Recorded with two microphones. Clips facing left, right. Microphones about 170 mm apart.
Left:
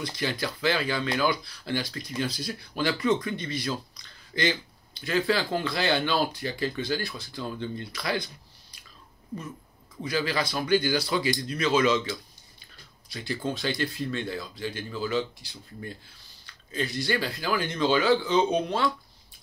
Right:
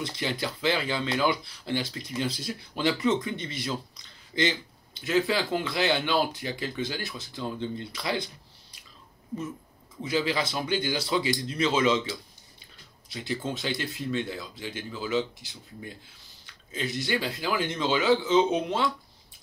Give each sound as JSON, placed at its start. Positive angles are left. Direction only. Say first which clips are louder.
{"t": 0.0, "sound": "speech", "louder": "left 1 dB", "side_deg": -25}
{"t": 10.0, "sound": "speech", "louder": "right 1 dB", "side_deg": -20}
{"t": 13.1, "sound": "speech", "louder": "left 1 dB", "side_deg": -20}